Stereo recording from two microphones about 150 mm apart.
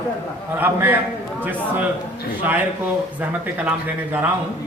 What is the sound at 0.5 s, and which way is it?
Speech, 15° right (ahead or behind).